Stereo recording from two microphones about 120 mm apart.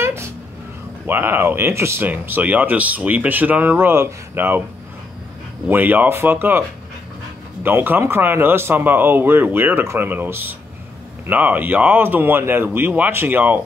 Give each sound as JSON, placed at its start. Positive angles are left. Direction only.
{"t": 0.0, "sound": "a sound", "side_deg": -20}
{"t": 1.0, "sound": "speech", "side_deg": -20}
{"t": 5.7, "sound": "speech", "side_deg": -15}
{"t": 7.6, "sound": "speech", "side_deg": -15}